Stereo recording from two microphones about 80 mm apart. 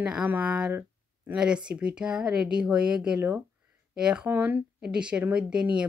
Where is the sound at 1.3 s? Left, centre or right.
Centre.